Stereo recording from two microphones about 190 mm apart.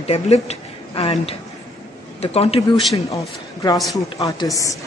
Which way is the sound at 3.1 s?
20° left (ahead or behind).